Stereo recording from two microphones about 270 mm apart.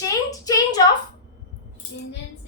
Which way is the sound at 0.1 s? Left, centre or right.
Centre.